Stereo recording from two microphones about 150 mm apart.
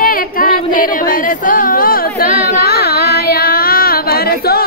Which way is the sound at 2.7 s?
90° left.